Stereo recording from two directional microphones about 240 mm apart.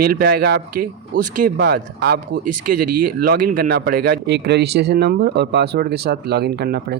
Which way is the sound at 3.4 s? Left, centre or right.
Right.